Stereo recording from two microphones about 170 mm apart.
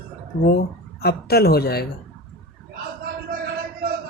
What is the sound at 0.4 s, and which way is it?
Speech, 65° left (ahead or behind).